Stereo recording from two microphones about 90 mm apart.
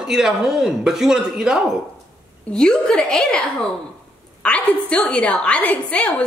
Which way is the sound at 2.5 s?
5° left (ahead or behind).